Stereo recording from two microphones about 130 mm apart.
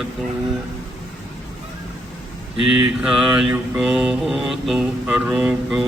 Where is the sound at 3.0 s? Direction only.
5° right (ahead or behind).